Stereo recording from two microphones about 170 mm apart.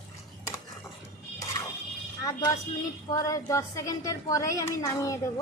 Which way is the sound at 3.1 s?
20° left (ahead or behind).